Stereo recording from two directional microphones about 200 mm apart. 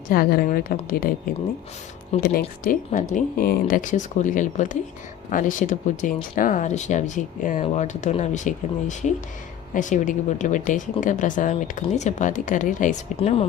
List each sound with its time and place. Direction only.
0.1 s a woman's voice: 50° left (ahead or behind); by 13.4 s 30° left (ahead or behind)